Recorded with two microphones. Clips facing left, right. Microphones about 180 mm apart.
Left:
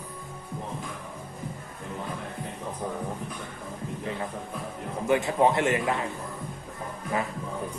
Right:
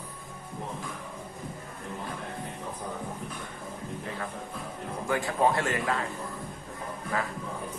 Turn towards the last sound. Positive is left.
turn(degrees=20)  # may be behind; listen again after turning